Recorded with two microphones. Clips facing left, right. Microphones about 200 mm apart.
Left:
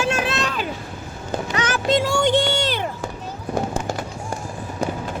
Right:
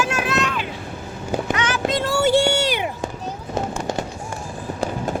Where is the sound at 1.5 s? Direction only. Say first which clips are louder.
Even; 40° left (ahead or behind).